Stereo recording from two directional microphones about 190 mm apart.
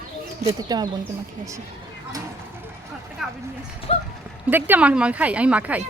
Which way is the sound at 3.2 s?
5° right (ahead or behind).